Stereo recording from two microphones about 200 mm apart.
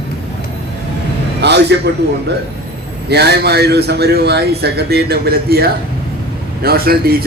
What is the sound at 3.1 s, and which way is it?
Speech, 55° right (ahead or behind).